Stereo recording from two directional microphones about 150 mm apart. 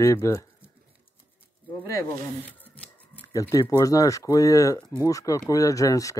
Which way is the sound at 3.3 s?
20° left (ahead or behind).